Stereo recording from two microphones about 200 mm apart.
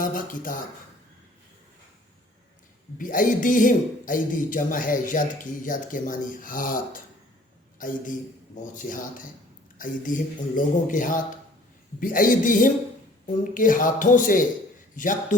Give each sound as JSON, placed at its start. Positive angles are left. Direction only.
{"t": 0.0, "sound": "speech", "side_deg": 45}
{"t": 3.0, "sound": "a man's voice", "side_deg": 40}